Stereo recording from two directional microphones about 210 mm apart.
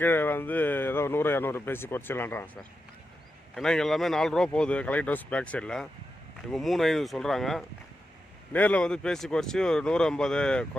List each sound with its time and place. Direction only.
0.0 s speech: 10° left (ahead or behind)
3.5 s speech: centre (ahead or behind)